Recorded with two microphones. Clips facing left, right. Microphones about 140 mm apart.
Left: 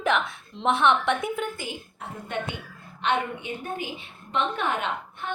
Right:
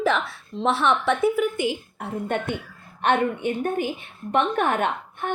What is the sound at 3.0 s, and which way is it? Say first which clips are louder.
A woman's voice: right 5 dB; 50° right (ahead or behind).